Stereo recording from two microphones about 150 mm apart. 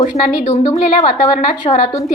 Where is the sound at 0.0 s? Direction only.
45° left (ahead or behind).